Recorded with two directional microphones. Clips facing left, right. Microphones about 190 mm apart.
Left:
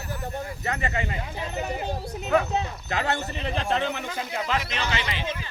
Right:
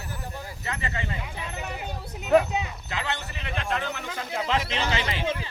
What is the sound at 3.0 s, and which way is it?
Speech, 40° left (ahead or behind).